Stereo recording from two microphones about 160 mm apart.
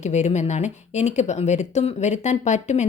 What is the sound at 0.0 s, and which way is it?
Speech, 45° left (ahead or behind).